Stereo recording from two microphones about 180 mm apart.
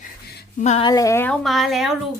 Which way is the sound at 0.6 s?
40° left (ahead or behind).